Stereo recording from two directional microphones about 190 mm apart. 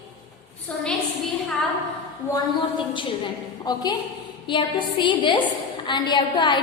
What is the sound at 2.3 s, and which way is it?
A woman's voice, 25° left (ahead or behind).